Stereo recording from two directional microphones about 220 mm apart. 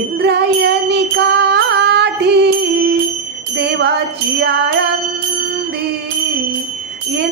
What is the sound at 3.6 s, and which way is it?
Jingle bell, 50° right (ahead or behind).